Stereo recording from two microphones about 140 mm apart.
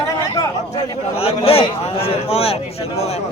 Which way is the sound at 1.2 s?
45° left (ahead or behind).